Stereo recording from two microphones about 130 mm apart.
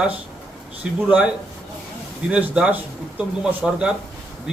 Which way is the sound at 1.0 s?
10° right (ahead or behind).